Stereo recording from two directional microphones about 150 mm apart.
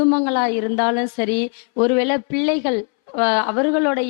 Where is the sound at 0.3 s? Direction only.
15° left (ahead or behind).